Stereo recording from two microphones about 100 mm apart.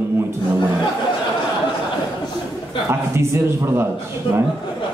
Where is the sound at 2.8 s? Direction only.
25° right (ahead or behind).